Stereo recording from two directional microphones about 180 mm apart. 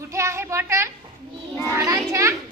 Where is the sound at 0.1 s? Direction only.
15° right (ahead or behind).